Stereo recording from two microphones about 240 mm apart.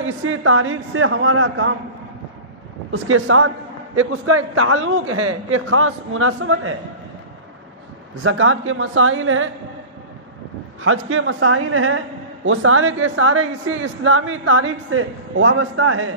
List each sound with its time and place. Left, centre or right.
0.0 s a man's voice: right
2.9 s a man's voice: right
8.2 s a man's voice: right
10.8 s a man's voice: right